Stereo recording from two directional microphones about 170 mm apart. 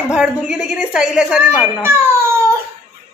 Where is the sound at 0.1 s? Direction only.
5° right (ahead or behind).